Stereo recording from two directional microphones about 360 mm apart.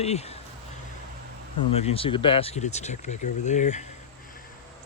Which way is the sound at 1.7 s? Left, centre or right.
Centre.